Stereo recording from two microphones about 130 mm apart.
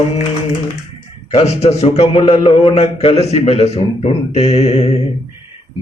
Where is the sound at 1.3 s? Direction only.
55° left (ahead or behind).